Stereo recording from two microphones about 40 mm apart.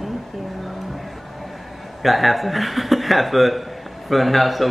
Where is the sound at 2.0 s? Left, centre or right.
Centre.